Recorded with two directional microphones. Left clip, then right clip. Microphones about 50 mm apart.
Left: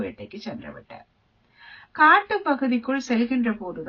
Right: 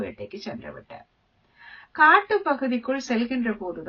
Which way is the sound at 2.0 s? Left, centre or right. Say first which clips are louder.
Even; right.